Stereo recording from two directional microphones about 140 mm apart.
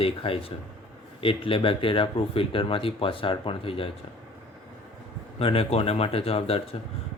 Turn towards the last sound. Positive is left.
turn(degrees=45)  # may be behind; listen again after turning